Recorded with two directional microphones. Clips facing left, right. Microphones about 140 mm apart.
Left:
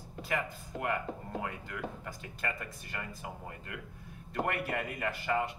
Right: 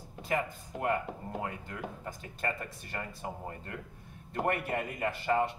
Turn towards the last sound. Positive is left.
turn(degrees=-30)  # may be behind; listen again after turning